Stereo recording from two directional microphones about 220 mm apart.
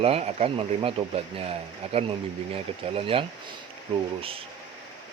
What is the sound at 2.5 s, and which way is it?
Speech, 25° right (ahead or behind).